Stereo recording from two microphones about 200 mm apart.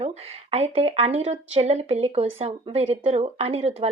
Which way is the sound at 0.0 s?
30° right (ahead or behind).